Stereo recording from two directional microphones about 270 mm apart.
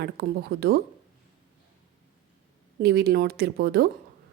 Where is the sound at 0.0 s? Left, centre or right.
Right.